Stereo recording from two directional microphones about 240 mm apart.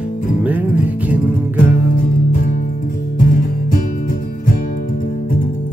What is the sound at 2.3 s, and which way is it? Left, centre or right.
Music, left.